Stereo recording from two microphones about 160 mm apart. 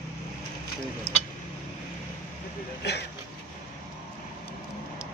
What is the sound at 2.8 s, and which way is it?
Speech, 90° left.